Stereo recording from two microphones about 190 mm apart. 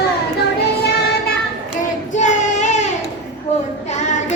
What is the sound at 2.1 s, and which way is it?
Child singing, 40° left (ahead or behind).